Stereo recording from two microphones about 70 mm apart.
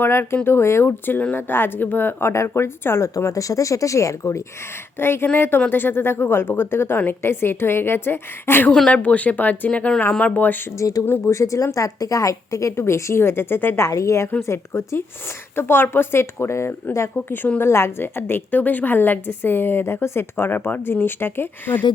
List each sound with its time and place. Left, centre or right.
0.0 s a woman's voice: left
4.9 s a woman's voice: left
8.9 s speech: centre
10.8 s speech: left
13.8 s a woman's voice: left